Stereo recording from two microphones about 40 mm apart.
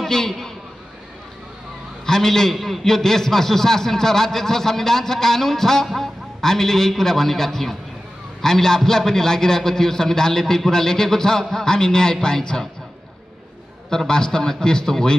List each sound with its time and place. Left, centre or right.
0.0 s a man's voice: centre
2.0 s a man's voice: centre
13.8 s a man's voice: centre